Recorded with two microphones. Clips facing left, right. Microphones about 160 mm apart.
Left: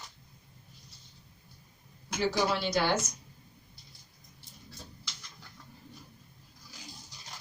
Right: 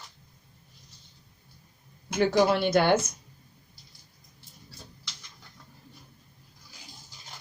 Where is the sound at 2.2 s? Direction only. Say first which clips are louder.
Right 7 dB; 55° right (ahead or behind).